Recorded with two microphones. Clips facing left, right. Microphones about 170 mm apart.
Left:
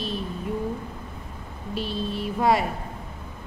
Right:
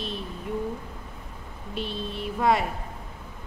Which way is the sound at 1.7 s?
35° left (ahead or behind).